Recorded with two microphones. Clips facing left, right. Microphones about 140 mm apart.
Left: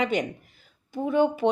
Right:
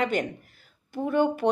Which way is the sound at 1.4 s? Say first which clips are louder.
Even; 25° left (ahead or behind).